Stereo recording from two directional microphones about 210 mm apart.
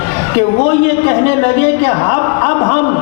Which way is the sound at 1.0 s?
15° left (ahead or behind).